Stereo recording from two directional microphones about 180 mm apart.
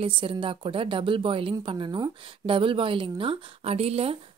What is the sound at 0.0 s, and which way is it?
A woman's voice, 30° right (ahead or behind).